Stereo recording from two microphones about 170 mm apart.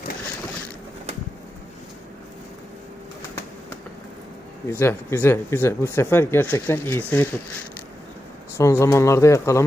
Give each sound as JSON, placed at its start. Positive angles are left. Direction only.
{"t": 4.7, "sound": "speech", "side_deg": 15}
{"t": 8.5, "sound": "speech", "side_deg": 15}